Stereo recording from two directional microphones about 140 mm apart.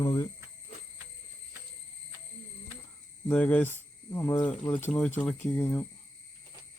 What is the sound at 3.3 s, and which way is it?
Speech, 10° left (ahead or behind).